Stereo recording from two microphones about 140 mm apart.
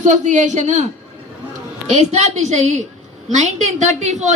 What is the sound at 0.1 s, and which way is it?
Speech, 60° right (ahead or behind).